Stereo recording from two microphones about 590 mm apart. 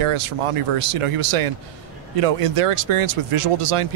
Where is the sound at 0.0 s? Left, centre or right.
Right.